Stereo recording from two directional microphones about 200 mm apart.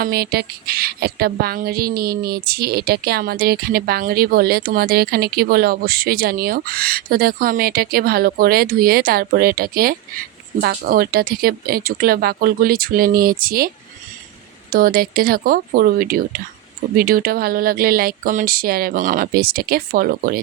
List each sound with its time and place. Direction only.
0.0 s speech: 50° right (ahead or behind)
14.7 s speech: 45° right (ahead or behind)